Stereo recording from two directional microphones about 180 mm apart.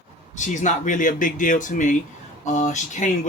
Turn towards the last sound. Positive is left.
turn(degrees=40)  # may be behind; listen again after turning